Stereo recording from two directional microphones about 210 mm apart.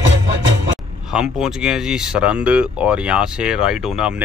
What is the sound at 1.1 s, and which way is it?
Speech, 5° right (ahead or behind).